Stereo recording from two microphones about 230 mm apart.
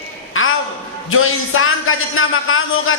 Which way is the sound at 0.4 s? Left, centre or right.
Left.